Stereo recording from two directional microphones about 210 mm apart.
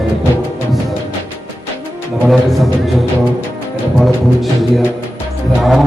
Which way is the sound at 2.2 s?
Centre (ahead or behind).